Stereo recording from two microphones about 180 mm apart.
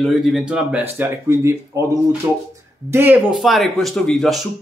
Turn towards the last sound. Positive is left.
turn(degrees=0)  # may be behind; listen again after turning